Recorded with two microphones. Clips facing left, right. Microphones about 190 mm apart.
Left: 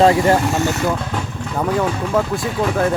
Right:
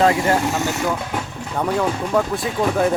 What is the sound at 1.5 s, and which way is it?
Speech, centre (ahead or behind).